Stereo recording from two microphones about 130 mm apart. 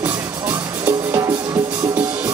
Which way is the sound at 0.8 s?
20° right (ahead or behind).